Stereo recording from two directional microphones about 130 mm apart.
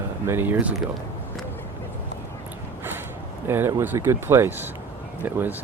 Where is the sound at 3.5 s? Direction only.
20° right (ahead or behind).